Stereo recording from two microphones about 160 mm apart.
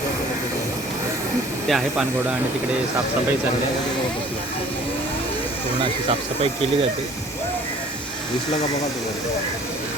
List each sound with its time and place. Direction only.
1.6 s speech: centre (ahead or behind)
5.8 s speech: 35° right (ahead or behind)